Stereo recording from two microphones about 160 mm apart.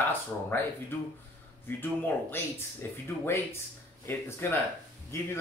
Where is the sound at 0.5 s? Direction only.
15° left (ahead or behind).